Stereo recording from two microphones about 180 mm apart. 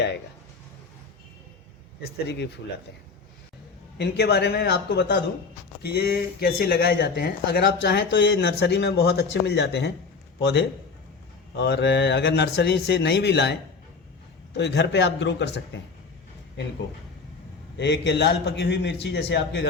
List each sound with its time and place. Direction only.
3.9 s speech: 65° left (ahead or behind)
17.7 s speech: 70° left (ahead or behind)